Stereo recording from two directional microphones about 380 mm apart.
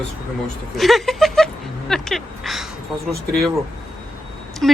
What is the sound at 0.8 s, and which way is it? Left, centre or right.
A woman's voice, centre.